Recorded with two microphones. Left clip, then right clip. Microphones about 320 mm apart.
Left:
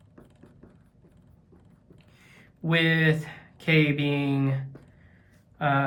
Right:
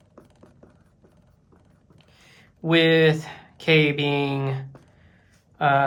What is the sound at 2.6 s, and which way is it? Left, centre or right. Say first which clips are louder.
Speech: right 6 dB; centre.